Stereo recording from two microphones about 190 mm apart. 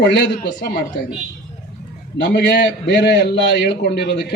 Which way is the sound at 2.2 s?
65° left (ahead or behind).